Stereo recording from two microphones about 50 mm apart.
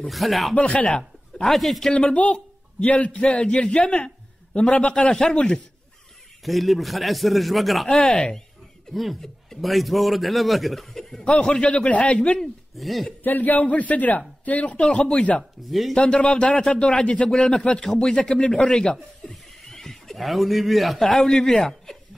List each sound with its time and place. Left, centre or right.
0.1 s a man's voice: centre
0.6 s a man's voice: left
1.4 s a man's voice: centre
2.0 s a man's voice: left
6.4 s a man's voice: centre
8.0 s a man's voice: centre
8.9 s a man's voice: centre
11.1 s a man's voice: left
12.4 s speech: centre
13.2 s a man's voice: left; by 16.2 s centre
16.2 s a man's voice: left
17.3 s a man's voice: centre
19.6 s neigh: centre
20.2 s a man's voice: centre